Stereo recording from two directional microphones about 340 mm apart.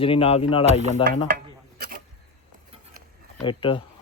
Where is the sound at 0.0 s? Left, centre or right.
Centre.